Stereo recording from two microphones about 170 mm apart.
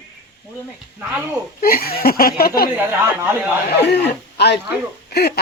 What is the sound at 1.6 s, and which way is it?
Speech, 60° left (ahead or behind).